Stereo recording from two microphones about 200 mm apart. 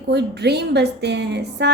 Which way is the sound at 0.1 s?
55° right (ahead or behind).